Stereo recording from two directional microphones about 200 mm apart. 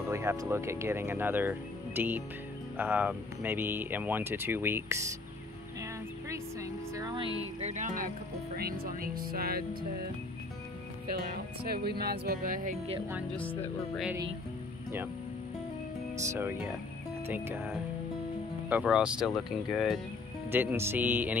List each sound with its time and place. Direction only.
0.1 s speech: 15° right (ahead or behind)
5.8 s music: 15° right (ahead or behind)
7.6 s speech: 35° right (ahead or behind)
8.5 s music: 50° right (ahead or behind)
11.1 s music: 50° right (ahead or behind)
13.3 s speech: 10° left (ahead or behind)
16.2 s speech: 15° right (ahead or behind)
20.5 s speech: 10° right (ahead or behind)